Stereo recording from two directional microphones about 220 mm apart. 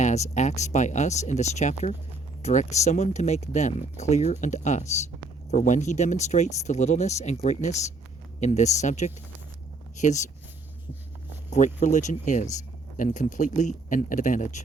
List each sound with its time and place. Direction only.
0.0 s speech: 30° left (ahead or behind)
11.5 s speech: 35° left (ahead or behind)